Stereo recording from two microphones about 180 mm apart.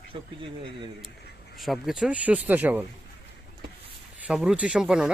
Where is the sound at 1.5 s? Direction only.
Centre (ahead or behind).